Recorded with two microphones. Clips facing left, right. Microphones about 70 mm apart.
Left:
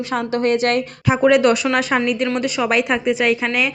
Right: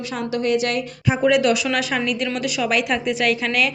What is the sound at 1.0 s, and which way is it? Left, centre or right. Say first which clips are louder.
A woman's voice: left 3 dB; left.